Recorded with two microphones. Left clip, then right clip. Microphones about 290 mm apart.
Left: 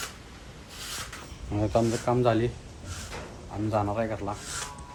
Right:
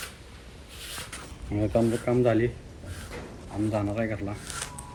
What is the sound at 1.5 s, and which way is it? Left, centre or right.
Speech, right.